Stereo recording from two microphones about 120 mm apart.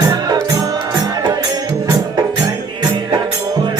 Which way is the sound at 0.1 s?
30° right (ahead or behind).